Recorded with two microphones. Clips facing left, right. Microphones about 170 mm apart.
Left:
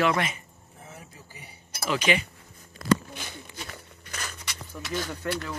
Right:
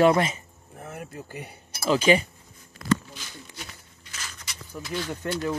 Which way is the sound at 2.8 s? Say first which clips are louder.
Left 1 dB; 35° left (ahead or behind).